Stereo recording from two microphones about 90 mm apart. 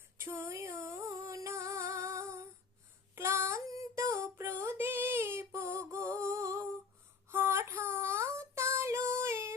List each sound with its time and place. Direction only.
0.2 s music: 30° right (ahead or behind)
3.2 s child singing: 30° right (ahead or behind)
7.3 s female singing: 25° right (ahead or behind)